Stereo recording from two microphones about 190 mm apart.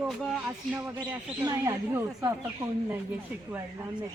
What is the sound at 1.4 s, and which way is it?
Speech, 15° right (ahead or behind).